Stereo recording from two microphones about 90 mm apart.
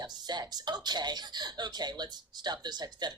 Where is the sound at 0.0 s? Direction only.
50° right (ahead or behind).